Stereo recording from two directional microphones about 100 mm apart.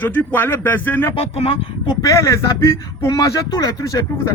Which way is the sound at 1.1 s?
75° left (ahead or behind).